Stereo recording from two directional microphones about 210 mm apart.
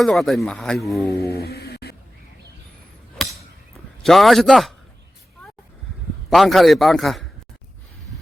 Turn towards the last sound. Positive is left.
turn(degrees=0)  # may be behind; listen again after turning